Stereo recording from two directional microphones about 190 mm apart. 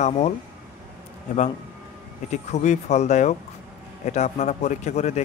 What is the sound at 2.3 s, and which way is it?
A man's voice, 35° left (ahead or behind).